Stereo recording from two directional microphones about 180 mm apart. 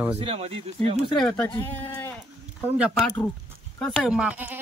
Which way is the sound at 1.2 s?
15° left (ahead or behind).